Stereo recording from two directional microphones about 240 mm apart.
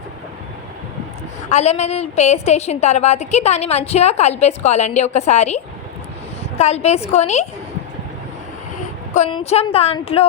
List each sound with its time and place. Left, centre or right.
1.5 s a woman's voice: left
9.1 s a woman's voice: left